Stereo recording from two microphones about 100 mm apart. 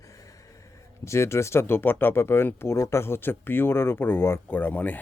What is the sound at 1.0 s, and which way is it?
Speech, 30° left (ahead or behind).